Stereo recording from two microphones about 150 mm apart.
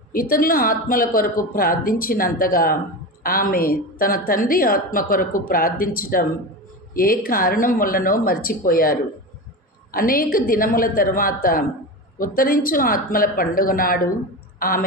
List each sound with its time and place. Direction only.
0.1 s a woman's voice: 75° left (ahead or behind)